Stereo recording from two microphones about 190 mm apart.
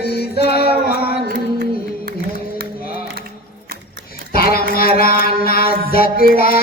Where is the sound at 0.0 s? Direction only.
55° left (ahead or behind).